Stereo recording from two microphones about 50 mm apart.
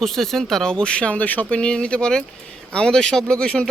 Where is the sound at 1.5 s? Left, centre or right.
Centre.